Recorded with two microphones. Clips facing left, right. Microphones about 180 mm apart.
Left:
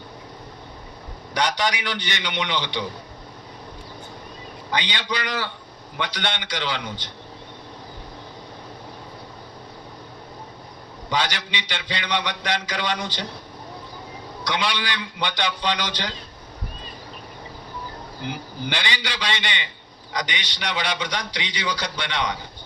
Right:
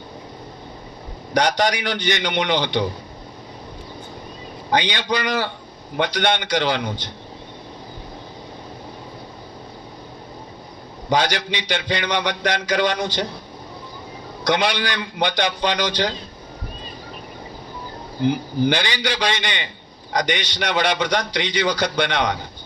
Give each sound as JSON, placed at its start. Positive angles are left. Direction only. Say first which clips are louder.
{"t": 1.3, "sound": "a man's voice", "louder": "right 5 dB", "side_deg": -45}
{"t": 4.7, "sound": "a man's voice", "louder": "right 6 dB", "side_deg": -45}
{"t": 11.1, "sound": "a man's voice", "louder": "right 6 dB", "side_deg": -45}
{"t": 14.4, "sound": "a man's voice", "louder": "right 6 dB", "side_deg": -45}
{"t": 18.6, "sound": "a man's voice", "louder": "right 8 dB", "side_deg": -45}